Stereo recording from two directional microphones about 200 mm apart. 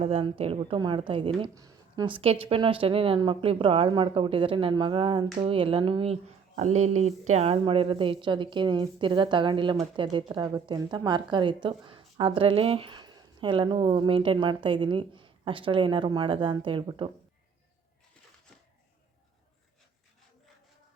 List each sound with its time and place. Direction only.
0.0 s a woman's voice: 30° right (ahead or behind)